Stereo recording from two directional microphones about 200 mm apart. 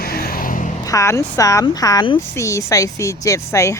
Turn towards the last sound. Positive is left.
turn(degrees=15)  # may be behind; listen again after turning